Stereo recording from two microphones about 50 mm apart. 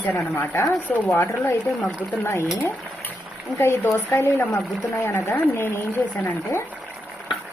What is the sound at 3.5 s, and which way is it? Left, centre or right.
Speech, left.